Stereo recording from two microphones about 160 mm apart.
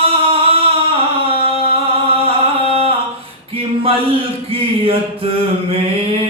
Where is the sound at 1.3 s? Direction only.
35° right (ahead or behind).